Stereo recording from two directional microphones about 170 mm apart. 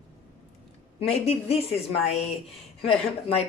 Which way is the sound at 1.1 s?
35° left (ahead or behind).